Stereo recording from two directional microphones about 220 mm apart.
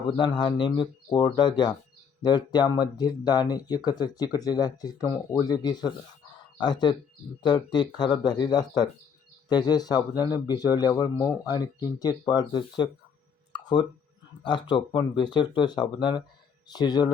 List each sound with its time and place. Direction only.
0.2 s speech: 20° left (ahead or behind)
13.5 s a sound: 20° left (ahead or behind)
14.4 s speech: 20° left (ahead or behind)